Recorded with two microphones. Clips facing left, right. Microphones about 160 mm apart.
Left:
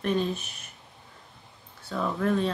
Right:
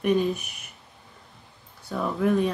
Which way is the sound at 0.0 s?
10° right (ahead or behind).